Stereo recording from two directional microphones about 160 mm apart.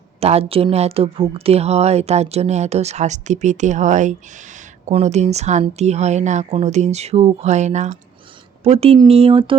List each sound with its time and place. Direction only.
0.2 s speech: 40° right (ahead or behind)